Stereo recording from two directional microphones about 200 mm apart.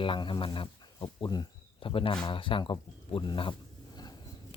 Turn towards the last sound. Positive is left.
turn(degrees=25)  # may be behind; listen again after turning